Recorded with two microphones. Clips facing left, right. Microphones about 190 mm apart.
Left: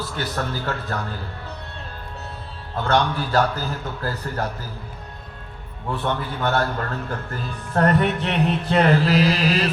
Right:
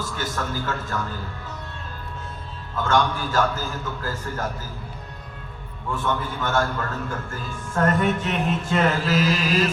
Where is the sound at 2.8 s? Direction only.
45° right (ahead or behind).